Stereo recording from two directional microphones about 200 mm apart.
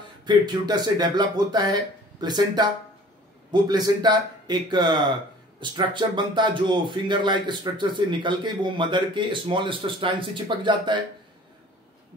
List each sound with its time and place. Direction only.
0.2 s speech: 20° right (ahead or behind)